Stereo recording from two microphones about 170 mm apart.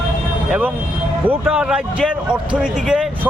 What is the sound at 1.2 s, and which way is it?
Speech, 5° right (ahead or behind).